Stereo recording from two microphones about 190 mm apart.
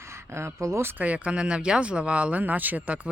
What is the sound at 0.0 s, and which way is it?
Speech, 15° right (ahead or behind).